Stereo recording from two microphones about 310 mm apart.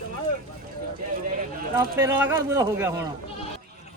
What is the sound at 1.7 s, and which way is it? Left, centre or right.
Speech, centre.